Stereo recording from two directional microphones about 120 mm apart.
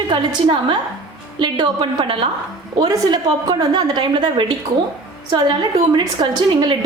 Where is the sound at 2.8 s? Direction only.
35° right (ahead or behind).